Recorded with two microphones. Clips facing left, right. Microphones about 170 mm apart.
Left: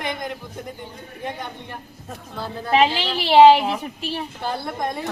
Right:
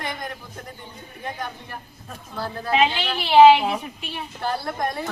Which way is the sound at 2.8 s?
35° left (ahead or behind).